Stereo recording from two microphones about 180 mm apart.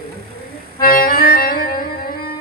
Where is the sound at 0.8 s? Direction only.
55° left (ahead or behind).